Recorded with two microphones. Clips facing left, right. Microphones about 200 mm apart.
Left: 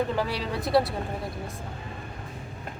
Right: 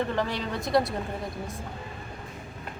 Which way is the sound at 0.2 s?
5° left (ahead or behind).